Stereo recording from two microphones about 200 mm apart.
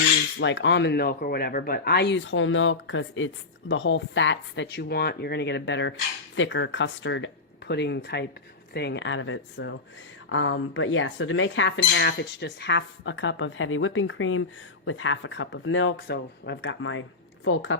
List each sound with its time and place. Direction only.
0.3 s speech: 65° left (ahead or behind)